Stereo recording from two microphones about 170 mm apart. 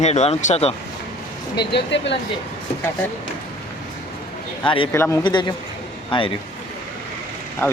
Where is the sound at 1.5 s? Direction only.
90° left.